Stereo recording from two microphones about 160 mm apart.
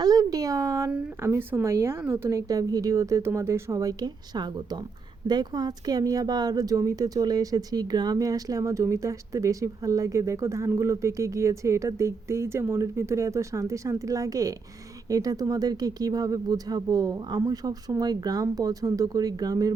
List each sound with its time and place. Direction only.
0.0 s speech: 20° right (ahead or behind)
0.9 s speech: 5° right (ahead or behind); by 19.7 s 25° right (ahead or behind)